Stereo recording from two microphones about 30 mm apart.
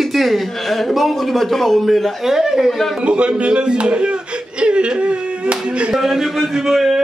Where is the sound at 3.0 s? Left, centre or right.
Right.